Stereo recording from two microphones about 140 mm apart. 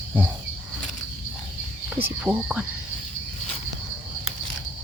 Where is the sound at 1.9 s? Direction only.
10° right (ahead or behind).